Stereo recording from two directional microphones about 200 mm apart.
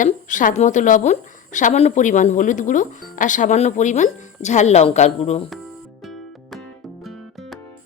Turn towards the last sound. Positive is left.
turn(degrees=0)  # may be behind; listen again after turning